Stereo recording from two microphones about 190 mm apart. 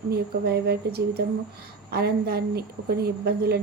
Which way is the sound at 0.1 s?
55° right (ahead or behind).